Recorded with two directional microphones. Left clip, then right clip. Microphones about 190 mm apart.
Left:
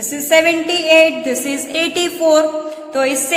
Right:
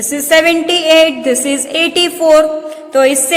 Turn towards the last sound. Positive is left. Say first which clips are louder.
# right 6 dB
turn(degrees=-35)  # may be behind; listen again after turning